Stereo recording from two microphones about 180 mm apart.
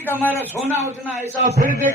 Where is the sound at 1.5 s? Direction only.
50° right (ahead or behind).